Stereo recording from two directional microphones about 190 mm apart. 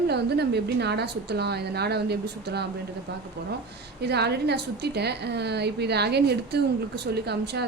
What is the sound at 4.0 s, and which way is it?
A woman's voice, 60° right (ahead or behind).